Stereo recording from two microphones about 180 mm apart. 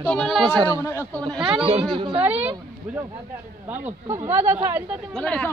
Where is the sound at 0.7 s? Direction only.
15° left (ahead or behind).